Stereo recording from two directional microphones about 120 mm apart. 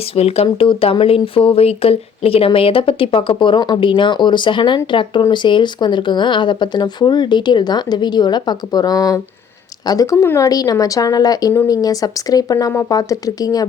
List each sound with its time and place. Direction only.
0.1 s speech: 55° left (ahead or behind); by 13.7 s 30° left (ahead or behind)